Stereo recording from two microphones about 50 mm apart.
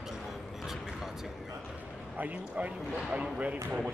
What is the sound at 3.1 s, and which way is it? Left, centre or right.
Speech, right.